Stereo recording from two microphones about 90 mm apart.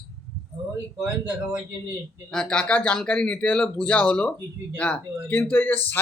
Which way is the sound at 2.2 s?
10° left (ahead or behind).